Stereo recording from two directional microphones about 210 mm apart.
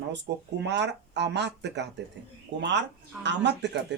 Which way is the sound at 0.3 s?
50° right (ahead or behind).